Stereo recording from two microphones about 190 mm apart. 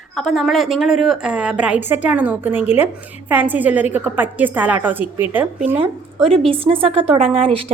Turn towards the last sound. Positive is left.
turn(degrees=-30)  # may be behind; listen again after turning